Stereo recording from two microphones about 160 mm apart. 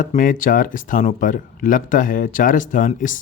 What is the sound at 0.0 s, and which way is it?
Speech, 55° left (ahead or behind).